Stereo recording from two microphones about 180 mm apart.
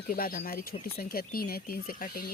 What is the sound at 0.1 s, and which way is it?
Speech, 55° left (ahead or behind).